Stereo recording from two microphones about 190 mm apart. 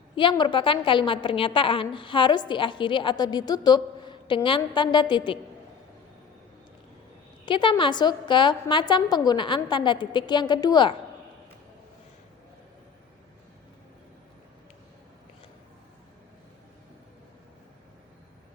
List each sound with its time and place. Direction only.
0.2 s a woman's voice: 25° left (ahead or behind)
7.4 s a woman's voice: 25° left (ahead or behind)